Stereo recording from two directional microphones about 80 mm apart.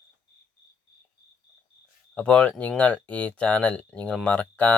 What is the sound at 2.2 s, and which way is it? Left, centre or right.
Speech, centre.